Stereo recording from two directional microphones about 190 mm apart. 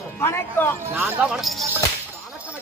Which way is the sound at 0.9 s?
10° right (ahead or behind).